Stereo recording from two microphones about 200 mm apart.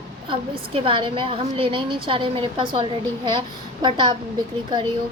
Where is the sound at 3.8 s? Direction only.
25° right (ahead or behind).